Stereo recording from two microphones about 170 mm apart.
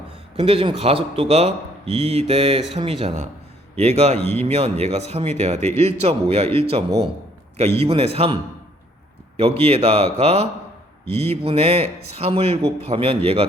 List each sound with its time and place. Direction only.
0.3 s speech: 30° right (ahead or behind)
9.4 s speech: 35° right (ahead or behind)